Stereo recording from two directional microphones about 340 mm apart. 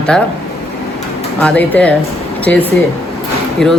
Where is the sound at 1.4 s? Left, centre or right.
Centre.